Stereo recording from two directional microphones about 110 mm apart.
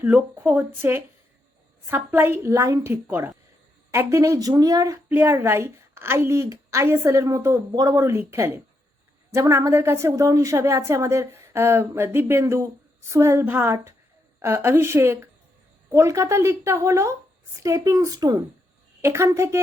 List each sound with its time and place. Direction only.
0.0 s a woman's voice: 15° right (ahead or behind); by 4.9 s 30° right (ahead or behind)
5.0 s a woman's voice: 20° right (ahead or behind)